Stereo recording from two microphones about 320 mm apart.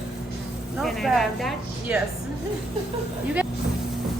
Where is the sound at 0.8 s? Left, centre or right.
Centre.